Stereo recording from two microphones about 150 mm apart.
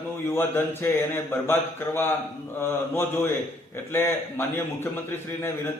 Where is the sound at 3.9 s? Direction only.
15° left (ahead or behind).